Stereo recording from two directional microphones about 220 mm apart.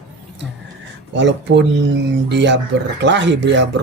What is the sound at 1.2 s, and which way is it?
Speech, 55° right (ahead or behind).